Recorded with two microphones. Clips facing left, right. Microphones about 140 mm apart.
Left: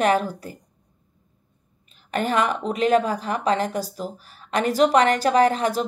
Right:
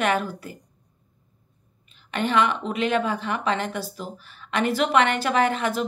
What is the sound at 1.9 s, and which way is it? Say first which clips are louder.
A woman's voice: left 1 dB; 40° left (ahead or behind).